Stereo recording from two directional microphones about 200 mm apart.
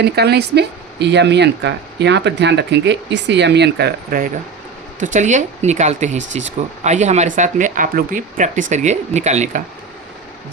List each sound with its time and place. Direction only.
0.0 s speech: 55° right (ahead or behind)
4.9 s speech: 40° right (ahead or behind)